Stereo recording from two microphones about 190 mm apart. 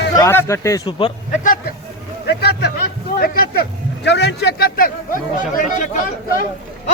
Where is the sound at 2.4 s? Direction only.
55° left (ahead or behind).